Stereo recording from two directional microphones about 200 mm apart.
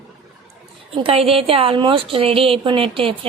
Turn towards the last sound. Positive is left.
turn(degrees=-25)  # may be behind; listen again after turning